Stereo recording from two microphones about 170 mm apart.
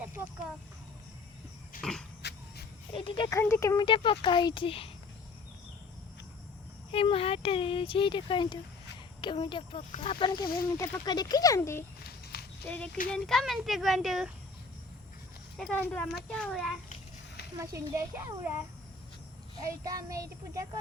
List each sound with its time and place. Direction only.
1.8 s a sound: 5° left (ahead or behind)
2.9 s speech: 30° left (ahead or behind)
3.2 s speech: 15° left (ahead or behind)
3.8 s speech: 30° left (ahead or behind)
6.9 s speech: 35° left (ahead or behind); by 11.9 s 15° left (ahead or behind)
12.0 s walk: 65° left (ahead or behind)
12.6 s a child's voice: 10° left (ahead or behind)
15.5 s a child's voice: 5° left (ahead or behind)
17.6 s a child's voice: 15° right (ahead or behind)
19.8 s child singing: 20° right (ahead or behind)